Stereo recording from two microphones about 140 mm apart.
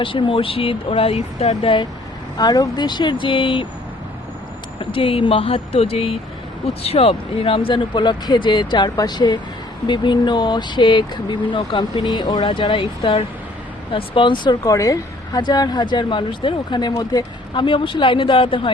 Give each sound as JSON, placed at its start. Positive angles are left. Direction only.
{"t": 0.0, "sound": "speech", "side_deg": 35}
{"t": 2.4, "sound": "speech", "side_deg": 30}
{"t": 4.8, "sound": "speech", "side_deg": 40}